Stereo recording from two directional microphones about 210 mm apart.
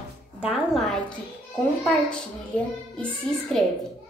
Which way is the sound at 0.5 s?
Centre (ahead or behind).